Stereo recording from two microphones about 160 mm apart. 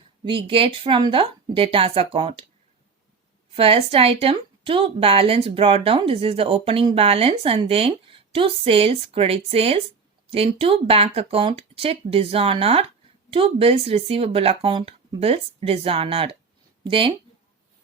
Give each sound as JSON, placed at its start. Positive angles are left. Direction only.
{"t": 0.3, "sound": "a woman's voice", "side_deg": -30}
{"t": 3.5, "sound": "a woman's voice", "side_deg": -35}